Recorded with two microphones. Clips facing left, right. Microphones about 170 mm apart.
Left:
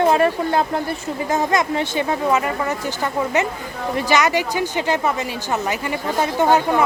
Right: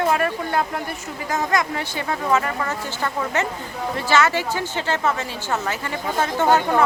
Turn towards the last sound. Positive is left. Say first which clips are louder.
# left 2 dB
turn(degrees=15)  # may be behind; listen again after turning